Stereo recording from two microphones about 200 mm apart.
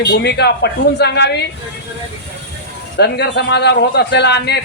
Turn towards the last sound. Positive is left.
turn(degrees=60)  # may be behind; listen again after turning